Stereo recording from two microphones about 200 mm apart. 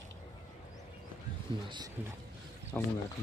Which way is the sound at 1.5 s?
25° right (ahead or behind).